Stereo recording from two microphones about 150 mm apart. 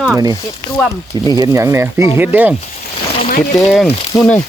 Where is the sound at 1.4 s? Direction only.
20° right (ahead or behind).